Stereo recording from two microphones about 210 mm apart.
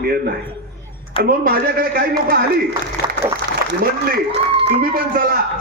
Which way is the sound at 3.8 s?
45° right (ahead or behind).